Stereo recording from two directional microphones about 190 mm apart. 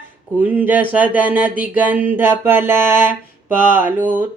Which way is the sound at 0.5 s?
10° right (ahead or behind).